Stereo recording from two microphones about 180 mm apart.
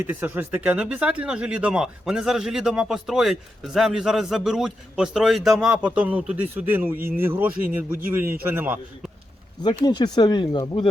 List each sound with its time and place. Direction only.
0.0 s speech: 10° right (ahead or behind)
7.5 s speech: 55° right (ahead or behind)
8.0 s speech: 10° right (ahead or behind)
9.8 s speech: 25° left (ahead or behind)